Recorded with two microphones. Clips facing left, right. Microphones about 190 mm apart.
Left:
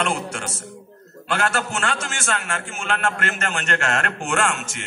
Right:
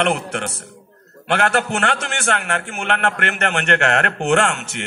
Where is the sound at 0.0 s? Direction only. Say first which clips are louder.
Right 5 dB; 65° right (ahead or behind).